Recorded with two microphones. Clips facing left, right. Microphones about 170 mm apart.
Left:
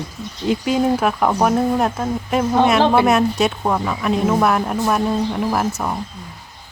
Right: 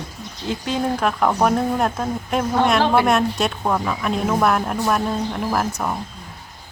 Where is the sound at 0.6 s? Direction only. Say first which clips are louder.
Left 3 dB; 10° left (ahead or behind).